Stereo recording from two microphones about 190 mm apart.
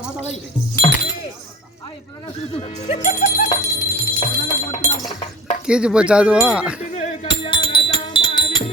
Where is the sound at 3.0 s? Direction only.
45° left (ahead or behind).